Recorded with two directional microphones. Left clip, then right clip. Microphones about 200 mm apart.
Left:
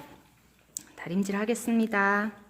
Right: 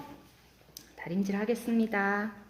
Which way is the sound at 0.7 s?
30° left (ahead or behind).